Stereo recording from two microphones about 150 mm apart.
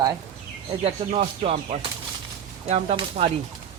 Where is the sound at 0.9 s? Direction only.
45° right (ahead or behind).